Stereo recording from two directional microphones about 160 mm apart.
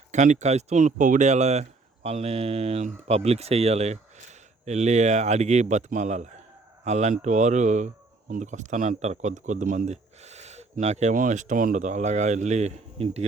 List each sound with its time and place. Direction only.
0.1 s speech: 50° right (ahead or behind)